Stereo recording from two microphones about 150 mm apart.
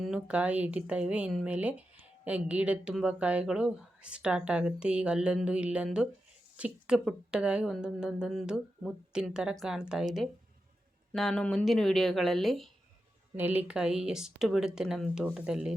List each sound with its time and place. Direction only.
0.0 s a woman's voice: 5° right (ahead or behind)
11.1 s a woman's voice: centre (ahead or behind)
13.3 s a woman's voice: 10° right (ahead or behind)